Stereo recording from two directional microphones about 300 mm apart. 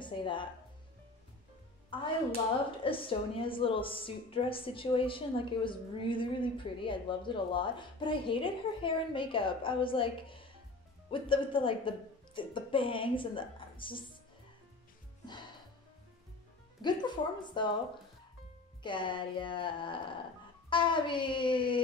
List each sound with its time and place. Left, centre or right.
0.0 s a woman's voice: centre
1.9 s a woman's voice: centre
15.2 s music: centre
16.8 s a woman's voice: centre
18.8 s a woman's voice: centre